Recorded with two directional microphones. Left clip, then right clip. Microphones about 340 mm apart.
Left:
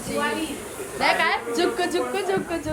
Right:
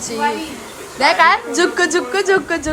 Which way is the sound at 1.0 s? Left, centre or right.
Right.